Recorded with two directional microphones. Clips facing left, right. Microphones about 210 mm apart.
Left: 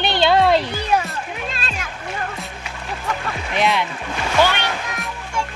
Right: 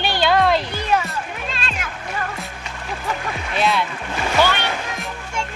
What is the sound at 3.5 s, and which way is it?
Speech, 15° left (ahead or behind).